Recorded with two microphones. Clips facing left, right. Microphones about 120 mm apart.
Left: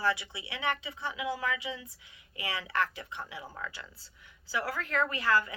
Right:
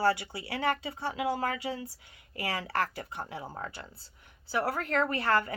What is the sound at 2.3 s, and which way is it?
Speech, 40° right (ahead or behind).